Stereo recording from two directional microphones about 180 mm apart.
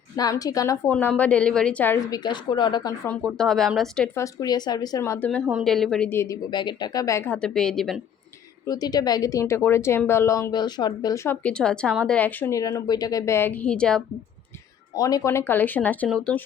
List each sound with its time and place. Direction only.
0.2 s speech: 20° left (ahead or behind)
0.9 s speech: 10° left (ahead or behind)
3.1 s speech: 5° left (ahead or behind)
4.2 s speech: 20° left (ahead or behind)
5.5 s speech: centre (ahead or behind)
8.6 s speech: 20° left (ahead or behind); by 14.0 s 5° left (ahead or behind)
14.9 s speech: 20° left (ahead or behind); by 16.4 s 5° left (ahead or behind)